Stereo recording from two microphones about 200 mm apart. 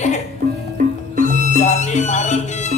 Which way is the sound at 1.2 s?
35° left (ahead or behind).